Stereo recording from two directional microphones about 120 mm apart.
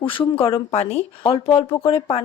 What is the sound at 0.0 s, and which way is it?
Speech, 45° left (ahead or behind).